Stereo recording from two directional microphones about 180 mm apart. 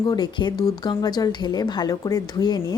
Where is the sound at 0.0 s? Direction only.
25° left (ahead or behind).